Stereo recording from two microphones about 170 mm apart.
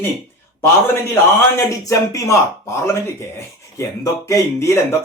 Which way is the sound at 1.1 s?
15° left (ahead or behind).